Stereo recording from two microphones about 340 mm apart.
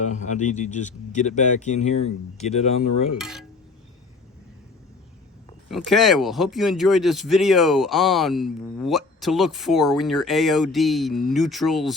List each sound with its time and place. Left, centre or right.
0.0 s speech: left
3.2 s speech: centre
5.6 s speech: centre